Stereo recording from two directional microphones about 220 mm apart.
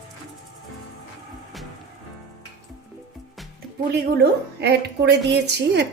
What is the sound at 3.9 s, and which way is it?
A woman's voice, 45° right (ahead or behind).